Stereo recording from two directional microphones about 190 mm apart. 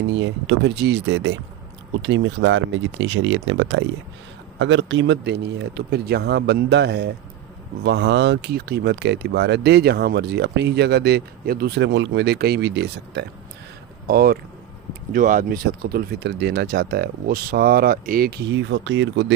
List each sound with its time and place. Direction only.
0.1 s speech: 75° right (ahead or behind)
14.1 s speech: 50° right (ahead or behind); by 19.0 s 75° right (ahead or behind)